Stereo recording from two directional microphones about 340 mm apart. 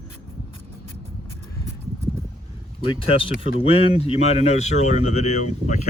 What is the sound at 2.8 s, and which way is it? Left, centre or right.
Speech, centre.